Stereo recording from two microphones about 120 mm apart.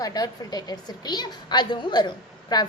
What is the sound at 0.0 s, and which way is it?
A woman's voice, 30° left (ahead or behind).